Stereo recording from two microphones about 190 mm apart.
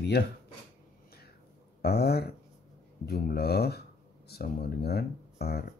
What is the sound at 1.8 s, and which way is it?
Speech, 55° left (ahead or behind).